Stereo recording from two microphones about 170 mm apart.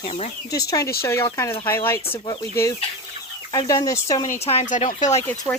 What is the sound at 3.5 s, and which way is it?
Speech, 25° left (ahead or behind).